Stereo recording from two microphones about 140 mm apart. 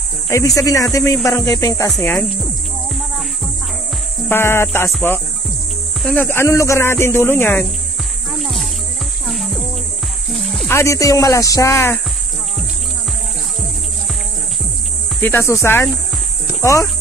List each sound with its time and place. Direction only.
0.3 s speech: 20° left (ahead or behind)
4.3 s speech: 15° left (ahead or behind)
8.3 s music: centre (ahead or behind)
9.3 s cricket: centre (ahead or behind)
10.3 s music: centre (ahead or behind)
10.7 s speech: 20° left (ahead or behind)
15.1 s speech: 15° left (ahead or behind)
16.4 s cricket: 20° left (ahead or behind)